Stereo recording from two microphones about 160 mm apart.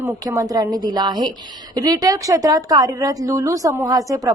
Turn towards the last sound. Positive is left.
turn(degrees=-25)  # may be behind; listen again after turning